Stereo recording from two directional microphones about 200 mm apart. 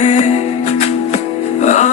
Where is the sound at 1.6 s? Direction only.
35° left (ahead or behind).